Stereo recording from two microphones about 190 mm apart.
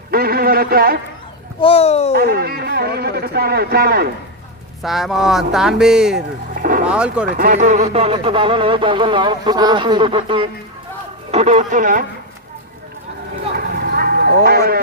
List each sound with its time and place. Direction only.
0.1 s speech: 50° right (ahead or behind)
1.6 s speech: 30° left (ahead or behind)
2.1 s speech: 55° right (ahead or behind)
4.8 s speech: centre (ahead or behind)
6.6 s a sound: 45° right (ahead or behind)
6.8 s speech: 5° right (ahead or behind)
7.3 s speech: 45° right (ahead or behind)
13.6 s vehicle: 55° right (ahead or behind)
14.4 s speech: 55° right (ahead or behind)